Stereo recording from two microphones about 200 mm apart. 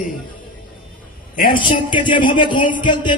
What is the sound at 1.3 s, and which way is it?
Speech, 45° left (ahead or behind).